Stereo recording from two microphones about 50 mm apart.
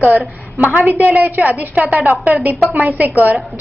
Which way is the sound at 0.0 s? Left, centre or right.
Right.